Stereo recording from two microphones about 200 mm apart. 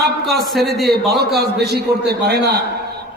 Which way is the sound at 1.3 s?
55° right (ahead or behind).